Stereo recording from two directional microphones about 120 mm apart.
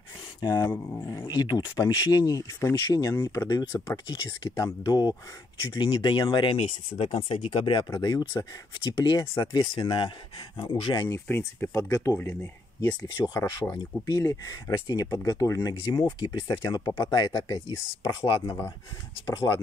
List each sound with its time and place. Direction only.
0.4 s speech: 20° left (ahead or behind)
1.2 s speech: 35° left (ahead or behind); by 7.8 s 50° left (ahead or behind)
7.9 s speech: 30° left (ahead or behind)
11.1 s speech: 15° left (ahead or behind); by 17.7 s 40° left (ahead or behind)
19.2 s speech: 30° left (ahead or behind)